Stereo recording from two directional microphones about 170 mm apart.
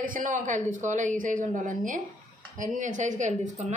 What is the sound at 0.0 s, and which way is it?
Speech, 50° right (ahead or behind).